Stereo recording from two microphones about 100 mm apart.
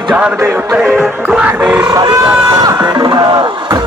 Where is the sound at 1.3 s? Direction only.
10° right (ahead or behind).